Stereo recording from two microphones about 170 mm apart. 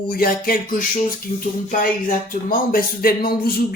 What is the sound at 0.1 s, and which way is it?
Speech, 60° left (ahead or behind).